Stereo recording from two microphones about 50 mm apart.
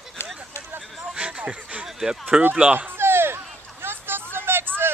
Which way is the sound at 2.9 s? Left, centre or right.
Right.